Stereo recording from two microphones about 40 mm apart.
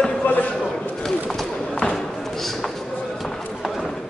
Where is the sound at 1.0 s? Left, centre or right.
Centre.